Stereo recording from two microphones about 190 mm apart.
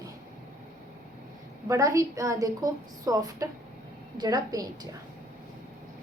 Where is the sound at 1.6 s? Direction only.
15° right (ahead or behind).